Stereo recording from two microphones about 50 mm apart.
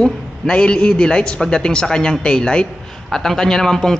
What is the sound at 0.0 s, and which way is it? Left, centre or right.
Speech, centre.